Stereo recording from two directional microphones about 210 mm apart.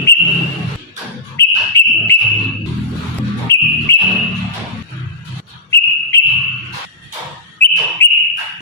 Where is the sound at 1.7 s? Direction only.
15° left (ahead or behind).